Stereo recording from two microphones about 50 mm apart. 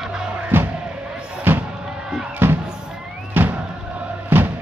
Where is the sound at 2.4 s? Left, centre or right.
Right.